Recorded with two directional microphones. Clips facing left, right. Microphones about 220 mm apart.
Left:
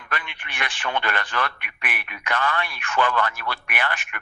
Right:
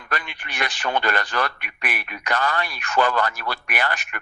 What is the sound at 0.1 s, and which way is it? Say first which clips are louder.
Speech: right 3 dB; 40° right (ahead or behind).